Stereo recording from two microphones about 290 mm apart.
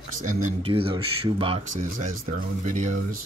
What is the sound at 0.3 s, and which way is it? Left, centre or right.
Speech, centre.